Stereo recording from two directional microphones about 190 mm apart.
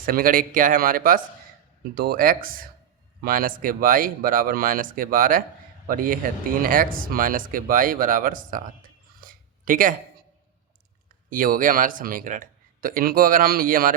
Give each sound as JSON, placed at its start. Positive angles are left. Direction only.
{"t": 0.0, "sound": "speech", "side_deg": -50}
{"t": 9.2, "sound": "a sound", "side_deg": -45}
{"t": 11.3, "sound": "speech", "side_deg": -45}